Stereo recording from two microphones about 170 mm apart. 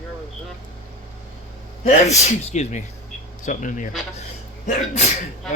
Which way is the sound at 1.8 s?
45° left (ahead or behind).